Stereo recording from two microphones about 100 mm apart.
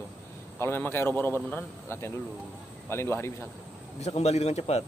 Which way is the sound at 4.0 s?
90° left.